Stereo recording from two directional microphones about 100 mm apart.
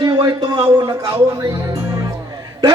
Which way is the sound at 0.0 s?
40° right (ahead or behind).